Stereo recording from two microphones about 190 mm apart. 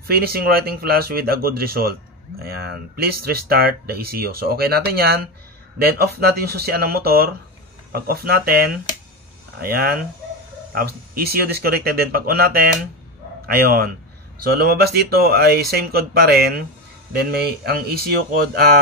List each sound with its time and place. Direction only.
0.1 s speech: 55° right (ahead or behind)
14.4 s speech: 55° right (ahead or behind)